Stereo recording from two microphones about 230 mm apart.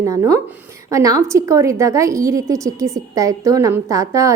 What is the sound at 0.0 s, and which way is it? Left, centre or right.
A woman's voice, centre.